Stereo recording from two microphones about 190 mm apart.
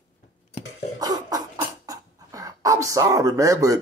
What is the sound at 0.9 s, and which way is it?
Cough, 20° right (ahead or behind).